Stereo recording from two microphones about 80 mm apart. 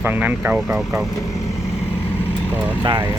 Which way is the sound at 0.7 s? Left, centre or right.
Centre.